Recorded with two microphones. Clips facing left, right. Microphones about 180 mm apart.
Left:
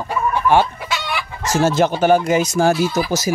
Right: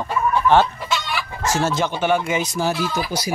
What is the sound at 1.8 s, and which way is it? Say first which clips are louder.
Speech: left 6 dB; 40° left (ahead or behind).